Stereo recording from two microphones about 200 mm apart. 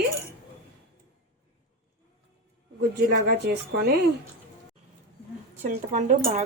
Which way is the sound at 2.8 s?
55° right (ahead or behind).